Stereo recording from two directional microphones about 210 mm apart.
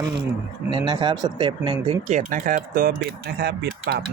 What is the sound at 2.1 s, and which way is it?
Speech, 40° right (ahead or behind).